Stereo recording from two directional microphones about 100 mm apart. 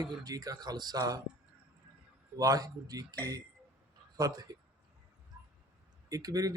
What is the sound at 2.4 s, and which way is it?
Speech, 35° right (ahead or behind).